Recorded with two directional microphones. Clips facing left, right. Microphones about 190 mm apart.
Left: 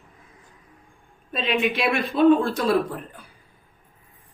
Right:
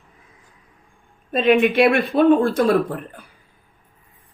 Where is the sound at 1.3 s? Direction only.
55° right (ahead or behind).